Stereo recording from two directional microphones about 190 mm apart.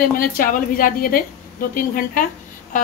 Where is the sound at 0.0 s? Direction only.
50° left (ahead or behind).